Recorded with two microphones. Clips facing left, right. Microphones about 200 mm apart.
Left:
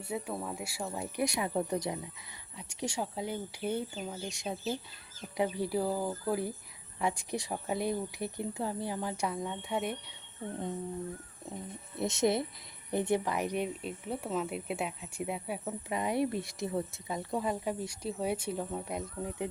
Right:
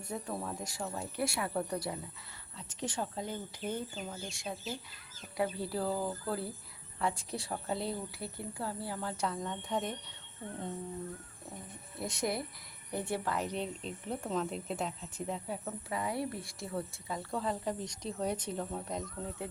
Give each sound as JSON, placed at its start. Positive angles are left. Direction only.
{"t": 0.0, "sound": "speech", "side_deg": 10}
{"t": 11.9, "sound": "speech", "side_deg": 25}